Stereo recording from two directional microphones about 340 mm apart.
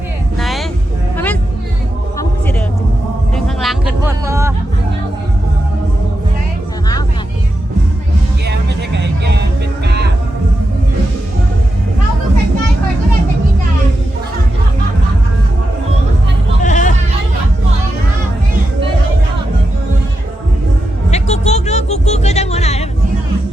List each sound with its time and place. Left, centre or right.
0.3 s vehicle: centre
1.1 s music: centre
3.3 s music: centre
8.4 s music: right
16.6 s music: left
21.1 s music: centre